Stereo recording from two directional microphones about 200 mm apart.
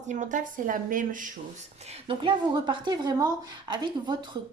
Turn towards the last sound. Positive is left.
turn(degrees=-20)  # may be behind; listen again after turning